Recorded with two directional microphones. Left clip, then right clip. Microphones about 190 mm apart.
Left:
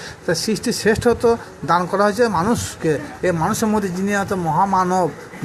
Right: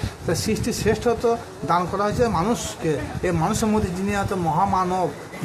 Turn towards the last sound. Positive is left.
turn(degrees=25)  # may be behind; listen again after turning